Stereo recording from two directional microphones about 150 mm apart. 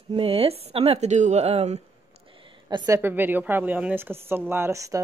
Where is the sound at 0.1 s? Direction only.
40° right (ahead or behind).